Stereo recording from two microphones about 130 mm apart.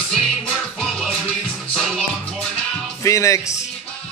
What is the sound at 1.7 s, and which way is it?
Music, centre (ahead or behind).